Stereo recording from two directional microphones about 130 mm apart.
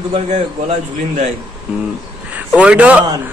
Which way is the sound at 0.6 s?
65° right (ahead or behind).